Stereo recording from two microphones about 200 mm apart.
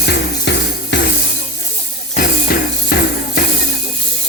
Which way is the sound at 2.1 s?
45° left (ahead or behind).